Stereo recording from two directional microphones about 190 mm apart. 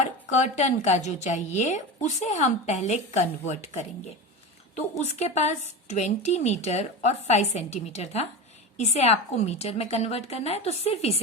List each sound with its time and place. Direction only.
0.3 s a woman's voice: 35° left (ahead or behind)